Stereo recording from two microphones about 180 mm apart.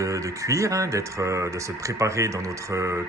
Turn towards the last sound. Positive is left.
turn(degrees=-15)  # may be behind; listen again after turning